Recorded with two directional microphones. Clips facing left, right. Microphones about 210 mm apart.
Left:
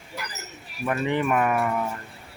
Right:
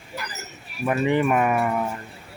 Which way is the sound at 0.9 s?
15° right (ahead or behind).